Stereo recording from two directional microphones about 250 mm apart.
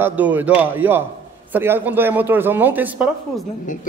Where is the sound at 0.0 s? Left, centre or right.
Centre.